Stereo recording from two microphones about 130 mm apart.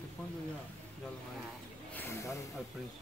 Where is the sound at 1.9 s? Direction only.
15° left (ahead or behind).